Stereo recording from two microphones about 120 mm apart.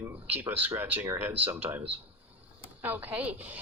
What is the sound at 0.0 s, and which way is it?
Speech, 15° right (ahead or behind).